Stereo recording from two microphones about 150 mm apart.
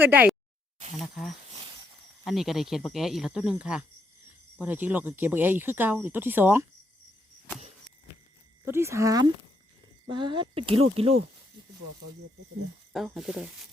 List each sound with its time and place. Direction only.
0.0 s speech: 10° right (ahead or behind)
0.9 s speech: 5° left (ahead or behind); by 6.7 s 15° right (ahead or behind)
8.6 s speech: 15° right (ahead or behind)
10.1 s speech: 30° right (ahead or behind)
12.9 s speech: centre (ahead or behind)